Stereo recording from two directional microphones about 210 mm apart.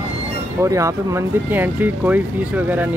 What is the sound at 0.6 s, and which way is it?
Speech, 15° right (ahead or behind).